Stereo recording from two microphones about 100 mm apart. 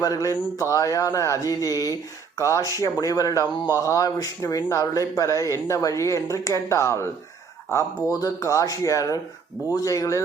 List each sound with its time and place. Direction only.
0.0 s speech: 35° left (ahead or behind)